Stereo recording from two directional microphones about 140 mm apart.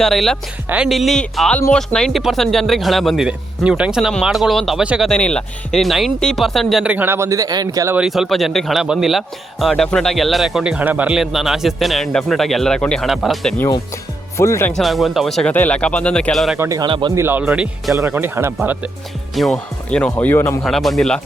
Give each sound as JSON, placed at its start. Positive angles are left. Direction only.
{"t": 0.0, "sound": "a man's voice", "side_deg": 0}
{"t": 5.0, "sound": "a man's voice", "side_deg": 5}
{"t": 7.9, "sound": "a man's voice", "side_deg": -5}
{"t": 14.3, "sound": "speech", "side_deg": 20}
{"t": 14.8, "sound": "a man's voice", "side_deg": 0}
{"t": 16.6, "sound": "speech", "side_deg": -20}
{"t": 17.9, "sound": "speech", "side_deg": -15}
{"t": 19.3, "sound": "speech", "side_deg": 0}
{"t": 20.1, "sound": "speech", "side_deg": 15}
{"t": 20.7, "sound": "a man's voice", "side_deg": 0}